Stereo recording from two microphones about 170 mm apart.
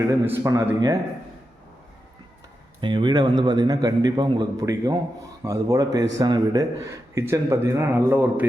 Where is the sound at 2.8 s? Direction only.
25° right (ahead or behind).